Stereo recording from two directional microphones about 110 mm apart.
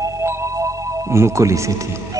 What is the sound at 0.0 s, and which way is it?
Music, 25° right (ahead or behind).